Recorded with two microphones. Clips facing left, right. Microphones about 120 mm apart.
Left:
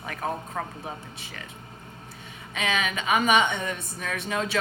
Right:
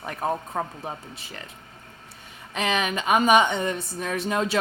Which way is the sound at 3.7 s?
30° right (ahead or behind).